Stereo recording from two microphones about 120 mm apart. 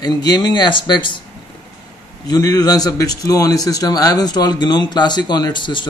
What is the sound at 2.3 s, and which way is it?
A man's voice, 30° left (ahead or behind).